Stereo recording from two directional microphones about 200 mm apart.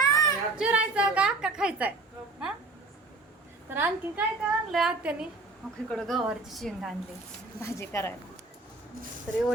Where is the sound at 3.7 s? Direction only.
10° right (ahead or behind).